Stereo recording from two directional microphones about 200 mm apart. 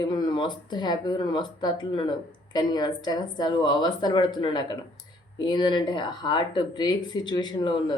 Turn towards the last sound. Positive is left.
turn(degrees=25)  # may be behind; listen again after turning